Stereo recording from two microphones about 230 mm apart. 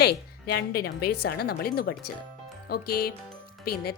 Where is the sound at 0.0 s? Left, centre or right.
Left.